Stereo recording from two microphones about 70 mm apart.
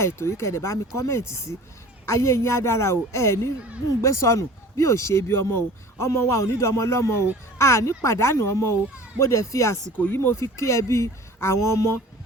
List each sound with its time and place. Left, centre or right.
0.0 s speech: left
10.0 s speech: left
10.4 s speech: left